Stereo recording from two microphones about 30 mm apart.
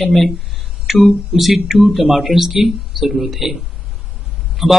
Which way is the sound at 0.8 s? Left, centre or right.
Centre.